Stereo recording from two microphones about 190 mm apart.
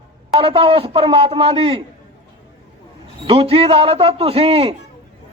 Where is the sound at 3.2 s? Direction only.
30° right (ahead or behind).